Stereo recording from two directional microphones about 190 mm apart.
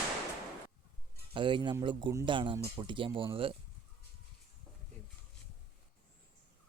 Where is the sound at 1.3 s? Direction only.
25° right (ahead or behind).